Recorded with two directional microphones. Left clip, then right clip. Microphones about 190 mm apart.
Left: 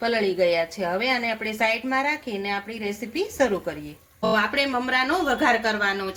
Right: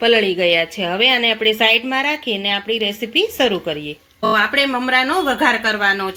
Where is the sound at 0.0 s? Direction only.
40° right (ahead or behind).